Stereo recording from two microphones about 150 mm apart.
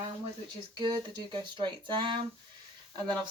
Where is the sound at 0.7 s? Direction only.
30° right (ahead or behind).